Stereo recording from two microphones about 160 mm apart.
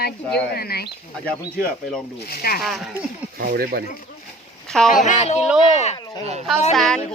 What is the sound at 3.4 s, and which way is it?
Speech, 70° right (ahead or behind).